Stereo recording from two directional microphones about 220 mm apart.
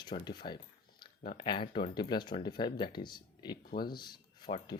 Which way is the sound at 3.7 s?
40° left (ahead or behind).